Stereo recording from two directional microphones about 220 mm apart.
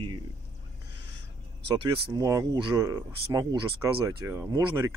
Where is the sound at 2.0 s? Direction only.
15° right (ahead or behind).